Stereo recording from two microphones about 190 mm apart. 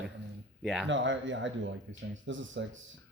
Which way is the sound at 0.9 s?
80° right.